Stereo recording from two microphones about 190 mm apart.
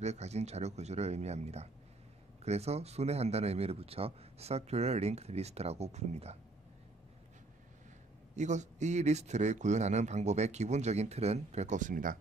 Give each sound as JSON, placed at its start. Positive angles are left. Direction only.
{"t": 0.0, "sound": "a man's voice", "side_deg": -35}
{"t": 8.4, "sound": "a man's voice", "side_deg": -40}